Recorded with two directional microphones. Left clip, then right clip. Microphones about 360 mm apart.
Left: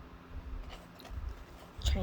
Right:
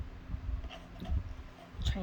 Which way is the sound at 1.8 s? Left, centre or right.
Left.